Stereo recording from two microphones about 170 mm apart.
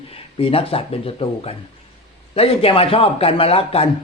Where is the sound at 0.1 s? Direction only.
35° left (ahead or behind).